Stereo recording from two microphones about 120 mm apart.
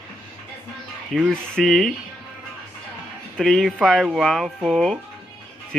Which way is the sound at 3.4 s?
5° left (ahead or behind).